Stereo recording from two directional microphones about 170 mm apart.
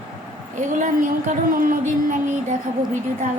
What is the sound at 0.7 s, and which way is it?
A woman's voice, 50° right (ahead or behind).